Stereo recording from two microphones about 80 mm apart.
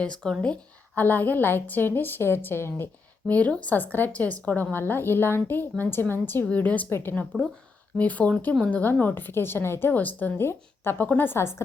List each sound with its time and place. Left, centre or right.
0.3 s a woman's voice: centre; by 11.6 s left